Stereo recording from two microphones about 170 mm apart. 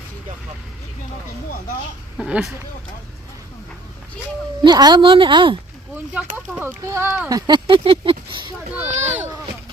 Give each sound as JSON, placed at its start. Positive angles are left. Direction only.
{"t": 2.1, "sound": "speech", "side_deg": -5}
{"t": 4.6, "sound": "speech", "side_deg": -25}
{"t": 6.6, "sound": "speech", "side_deg": -15}
{"t": 8.9, "sound": "speech", "side_deg": -40}
{"t": 9.1, "sound": "a sound", "side_deg": -15}